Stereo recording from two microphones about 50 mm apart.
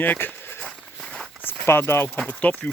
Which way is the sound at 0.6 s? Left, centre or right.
Centre.